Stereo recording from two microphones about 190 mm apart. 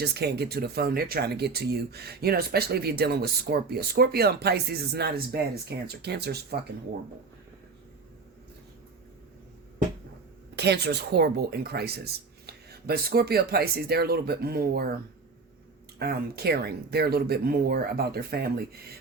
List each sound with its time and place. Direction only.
0.0 s speech: 60° right (ahead or behind)
10.5 s speech: 60° right (ahead or behind)
16.0 s speech: 55° right (ahead or behind)